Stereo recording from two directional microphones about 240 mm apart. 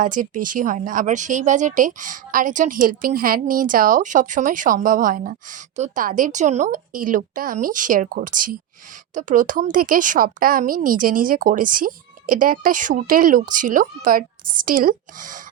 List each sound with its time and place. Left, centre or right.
0.0 s speech: right